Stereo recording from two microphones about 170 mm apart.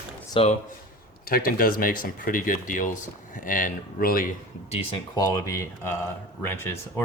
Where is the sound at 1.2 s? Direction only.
60° left (ahead or behind).